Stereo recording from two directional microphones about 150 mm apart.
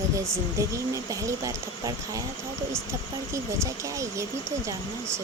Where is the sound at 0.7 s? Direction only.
20° right (ahead or behind).